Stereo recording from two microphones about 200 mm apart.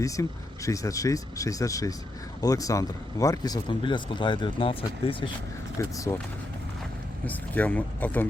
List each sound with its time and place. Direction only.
0.0 s speech: 15° left (ahead or behind)
5.8 s speech: 15° left (ahead or behind)
7.3 s speech: 10° left (ahead or behind)